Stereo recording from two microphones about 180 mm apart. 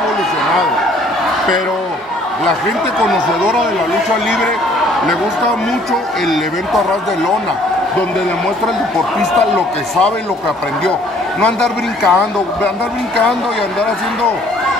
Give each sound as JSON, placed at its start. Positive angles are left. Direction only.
{"t": 6.2, "sound": "a man's voice", "side_deg": 0}
{"t": 11.4, "sound": "a man's voice", "side_deg": 0}